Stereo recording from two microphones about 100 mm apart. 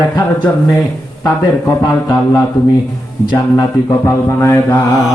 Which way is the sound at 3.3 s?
35° left (ahead or behind).